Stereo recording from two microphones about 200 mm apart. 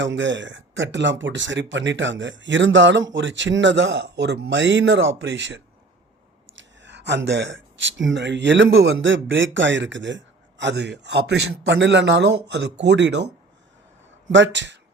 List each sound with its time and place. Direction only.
0.0 s speech: 65° right (ahead or behind)